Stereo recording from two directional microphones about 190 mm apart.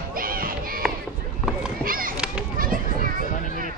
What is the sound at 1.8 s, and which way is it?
Run, 50° right (ahead or behind).